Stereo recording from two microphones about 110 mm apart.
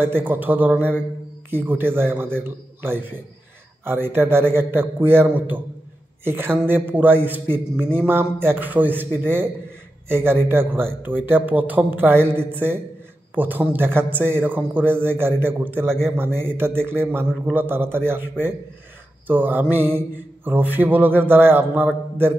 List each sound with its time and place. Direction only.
0.0 s a man's voice: 20° right (ahead or behind)
19.2 s a man's voice: 15° right (ahead or behind)